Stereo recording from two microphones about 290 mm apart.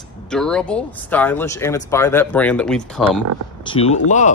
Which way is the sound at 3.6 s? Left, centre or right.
Centre.